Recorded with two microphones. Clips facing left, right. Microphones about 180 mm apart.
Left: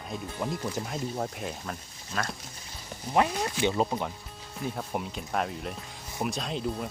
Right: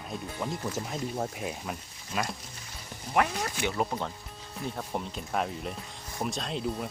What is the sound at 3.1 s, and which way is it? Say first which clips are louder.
Speech: left 2 dB; 20° left (ahead or behind).